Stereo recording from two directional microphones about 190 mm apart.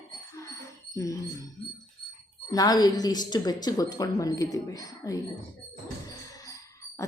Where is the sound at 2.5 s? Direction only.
20° left (ahead or behind).